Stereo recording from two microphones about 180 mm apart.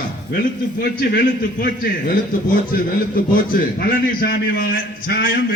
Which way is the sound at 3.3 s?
50° left (ahead or behind).